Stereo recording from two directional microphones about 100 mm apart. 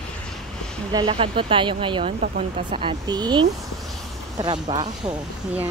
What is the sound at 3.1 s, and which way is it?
Speech, 45° right (ahead or behind).